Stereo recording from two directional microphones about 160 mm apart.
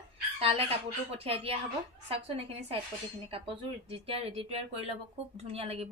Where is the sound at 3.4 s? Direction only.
35° right (ahead or behind).